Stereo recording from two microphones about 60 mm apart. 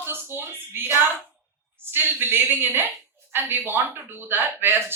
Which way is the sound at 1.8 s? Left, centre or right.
Right.